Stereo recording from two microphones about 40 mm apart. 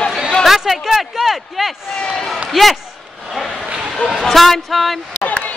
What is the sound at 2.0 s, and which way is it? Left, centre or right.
Speech, centre.